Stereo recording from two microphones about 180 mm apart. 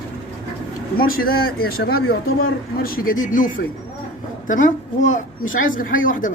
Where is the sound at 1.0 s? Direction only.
55° left (ahead or behind).